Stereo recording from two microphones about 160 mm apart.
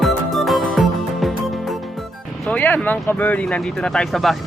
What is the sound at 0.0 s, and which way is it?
Music, centre (ahead or behind).